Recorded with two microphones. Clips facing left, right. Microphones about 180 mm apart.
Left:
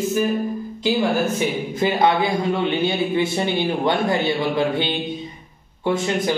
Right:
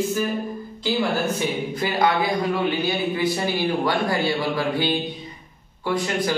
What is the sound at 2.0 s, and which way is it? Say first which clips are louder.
A man's voice: even; 25° left (ahead or behind).